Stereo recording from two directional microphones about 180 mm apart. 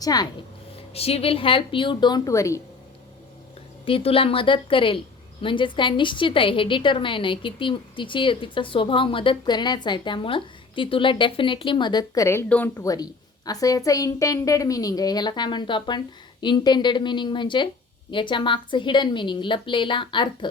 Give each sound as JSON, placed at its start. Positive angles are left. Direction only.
{"t": 0.0, "sound": "speech", "side_deg": 20}
{"t": 0.8, "sound": "a woman's voice", "side_deg": 35}
{"t": 3.8, "sound": "a woman's voice", "side_deg": 30}